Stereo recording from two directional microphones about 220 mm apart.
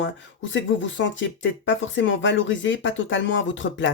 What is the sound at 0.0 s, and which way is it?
Speech, 60° left (ahead or behind).